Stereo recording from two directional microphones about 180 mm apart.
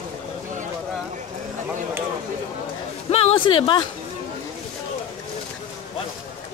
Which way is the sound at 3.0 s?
35° left (ahead or behind).